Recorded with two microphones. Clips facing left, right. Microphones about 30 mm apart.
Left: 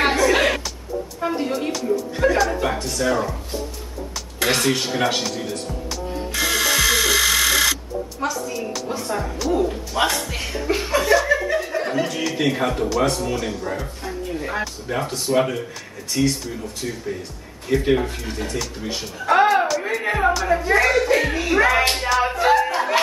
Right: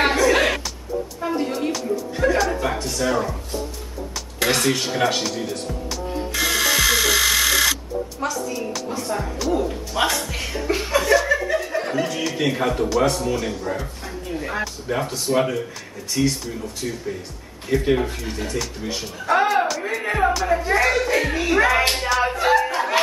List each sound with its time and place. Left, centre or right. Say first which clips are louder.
0.0 s music: even; centre
4.5 s music: left 1 dB; centre
8.8 s speech: left 1 dB; centre